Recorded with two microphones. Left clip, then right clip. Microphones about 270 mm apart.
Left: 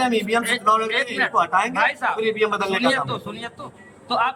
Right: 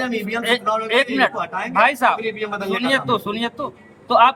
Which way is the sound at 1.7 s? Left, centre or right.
Right.